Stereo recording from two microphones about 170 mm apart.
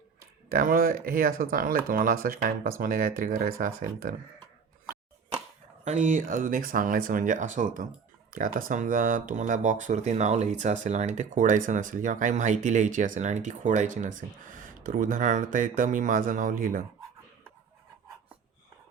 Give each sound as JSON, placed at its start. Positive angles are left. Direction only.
{"t": 0.5, "sound": "speech", "side_deg": -55}
{"t": 5.8, "sound": "speech", "side_deg": -45}